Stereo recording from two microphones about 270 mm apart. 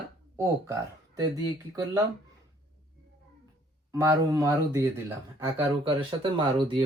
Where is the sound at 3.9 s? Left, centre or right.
Centre.